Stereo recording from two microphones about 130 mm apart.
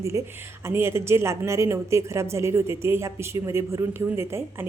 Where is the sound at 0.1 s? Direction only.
25° right (ahead or behind).